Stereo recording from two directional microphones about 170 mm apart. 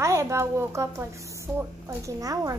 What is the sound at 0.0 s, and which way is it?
A woman's voice, 15° right (ahead or behind).